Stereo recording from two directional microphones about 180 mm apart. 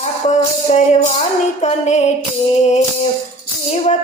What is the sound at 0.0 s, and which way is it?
Music, 40° left (ahead or behind).